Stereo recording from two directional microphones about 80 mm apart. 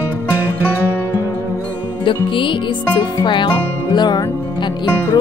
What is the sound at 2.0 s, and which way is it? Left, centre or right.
Music, left.